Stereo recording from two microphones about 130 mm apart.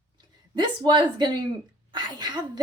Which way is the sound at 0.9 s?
35° right (ahead or behind).